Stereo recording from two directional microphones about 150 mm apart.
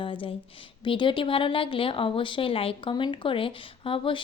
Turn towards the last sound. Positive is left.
turn(degrees=35)  # may be behind; listen again after turning